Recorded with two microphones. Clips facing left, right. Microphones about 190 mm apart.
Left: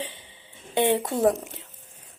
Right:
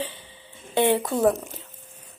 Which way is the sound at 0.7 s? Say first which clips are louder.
Right 1 dB; 20° left (ahead or behind).